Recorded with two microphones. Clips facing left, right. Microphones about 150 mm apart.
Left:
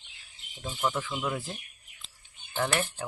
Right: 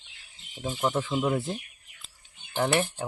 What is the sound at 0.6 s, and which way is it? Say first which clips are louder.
Speech: right 3 dB; 30° right (ahead or behind).